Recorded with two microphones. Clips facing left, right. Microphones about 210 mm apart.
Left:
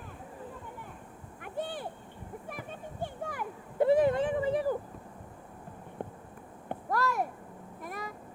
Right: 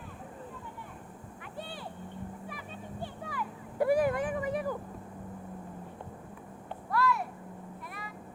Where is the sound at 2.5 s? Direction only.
50° left (ahead or behind).